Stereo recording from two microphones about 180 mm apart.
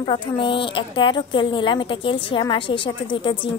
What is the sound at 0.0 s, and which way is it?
Speech, 30° left (ahead or behind).